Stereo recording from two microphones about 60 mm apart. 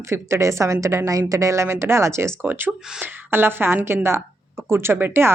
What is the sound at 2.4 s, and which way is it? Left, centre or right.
A woman's voice, right.